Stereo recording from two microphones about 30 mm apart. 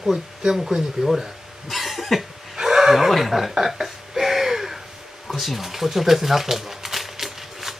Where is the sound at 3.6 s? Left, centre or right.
Centre.